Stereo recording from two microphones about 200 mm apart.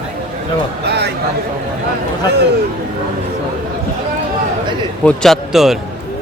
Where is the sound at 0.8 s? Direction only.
55° right (ahead or behind).